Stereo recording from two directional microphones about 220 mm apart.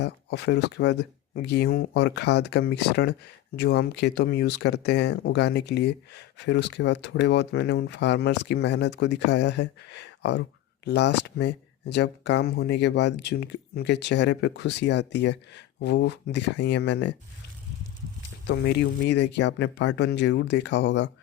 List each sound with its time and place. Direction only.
0.0 s speech: 50° left (ahead or behind)
18.4 s speech: 50° left (ahead or behind)